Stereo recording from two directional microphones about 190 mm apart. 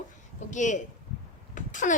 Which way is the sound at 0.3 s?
40° left (ahead or behind).